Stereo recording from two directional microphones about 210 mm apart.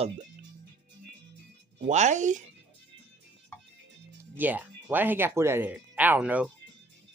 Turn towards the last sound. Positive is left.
turn(degrees=-5)  # may be behind; listen again after turning